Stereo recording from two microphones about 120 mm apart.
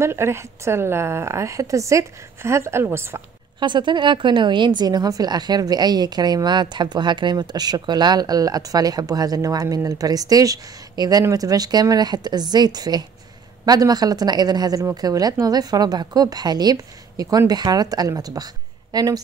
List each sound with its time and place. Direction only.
0.0 s a woman's voice: 20° right (ahead or behind)
3.5 s a woman's voice: 40° right (ahead or behind)